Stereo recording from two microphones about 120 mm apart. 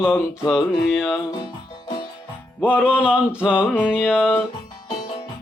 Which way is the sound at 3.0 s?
10° right (ahead or behind).